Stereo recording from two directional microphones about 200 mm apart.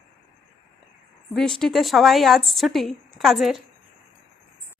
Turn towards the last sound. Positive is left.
turn(degrees=0)  # may be behind; listen again after turning